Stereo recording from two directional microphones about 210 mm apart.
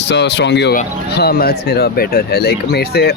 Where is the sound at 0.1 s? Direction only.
55° left (ahead or behind).